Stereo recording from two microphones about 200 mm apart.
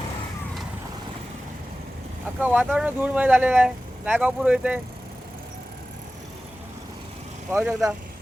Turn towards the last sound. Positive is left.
turn(degrees=-15)  # may be behind; listen again after turning